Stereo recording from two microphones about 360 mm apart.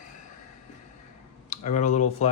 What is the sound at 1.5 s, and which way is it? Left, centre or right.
Speech, centre.